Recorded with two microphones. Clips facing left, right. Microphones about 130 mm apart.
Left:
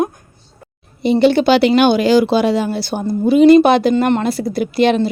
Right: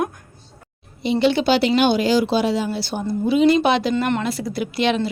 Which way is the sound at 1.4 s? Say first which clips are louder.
Left 5 dB; 70° left (ahead or behind).